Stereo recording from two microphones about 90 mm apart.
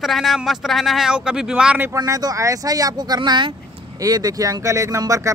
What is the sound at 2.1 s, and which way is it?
Speech, 40° right (ahead or behind).